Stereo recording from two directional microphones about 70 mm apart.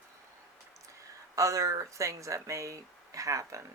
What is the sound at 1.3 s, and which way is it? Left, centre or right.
Speech, right.